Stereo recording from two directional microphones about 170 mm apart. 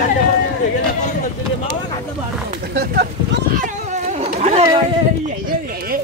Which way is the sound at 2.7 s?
75° right (ahead or behind).